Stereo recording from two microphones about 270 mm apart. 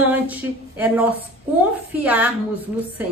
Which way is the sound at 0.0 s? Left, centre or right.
Centre.